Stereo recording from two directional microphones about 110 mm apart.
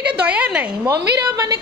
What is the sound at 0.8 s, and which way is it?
Speech, 35° right (ahead or behind).